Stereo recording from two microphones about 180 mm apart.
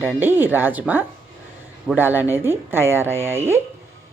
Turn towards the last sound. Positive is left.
turn(degrees=-15)  # may be behind; listen again after turning